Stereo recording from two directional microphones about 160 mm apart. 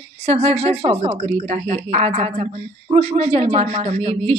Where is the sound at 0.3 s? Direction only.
40° right (ahead or behind).